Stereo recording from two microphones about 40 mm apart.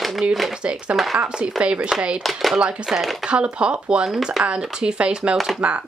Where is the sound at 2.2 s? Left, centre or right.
Centre.